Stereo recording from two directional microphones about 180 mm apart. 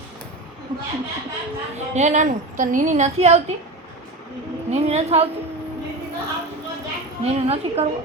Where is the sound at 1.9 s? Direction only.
40° right (ahead or behind).